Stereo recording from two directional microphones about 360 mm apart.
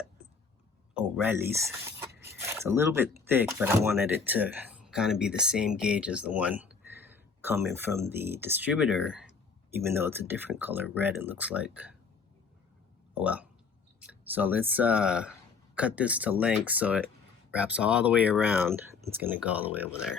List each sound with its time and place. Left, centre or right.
0.9 s speech: centre
13.1 s speech: centre